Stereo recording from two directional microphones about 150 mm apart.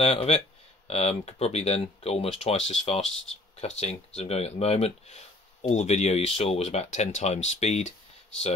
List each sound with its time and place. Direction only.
0.0 s speech: 40° left (ahead or behind)